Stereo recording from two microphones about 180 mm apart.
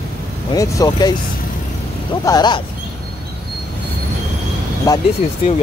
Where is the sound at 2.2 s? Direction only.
25° left (ahead or behind).